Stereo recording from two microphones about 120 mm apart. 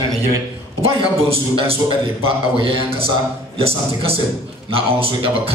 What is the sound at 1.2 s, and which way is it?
A man's voice, 50° right (ahead or behind).